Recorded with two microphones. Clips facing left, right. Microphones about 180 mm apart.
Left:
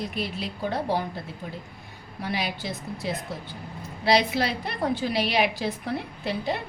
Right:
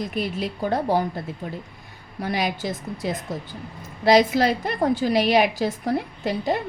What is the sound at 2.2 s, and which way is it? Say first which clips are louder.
A woman's voice: right 5 dB; 45° right (ahead or behind).